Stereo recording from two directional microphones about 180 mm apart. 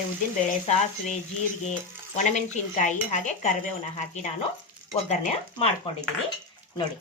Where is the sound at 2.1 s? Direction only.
40° left (ahead or behind).